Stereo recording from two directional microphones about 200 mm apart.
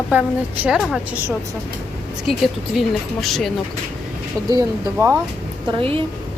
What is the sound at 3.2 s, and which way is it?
Speech, centre (ahead or behind).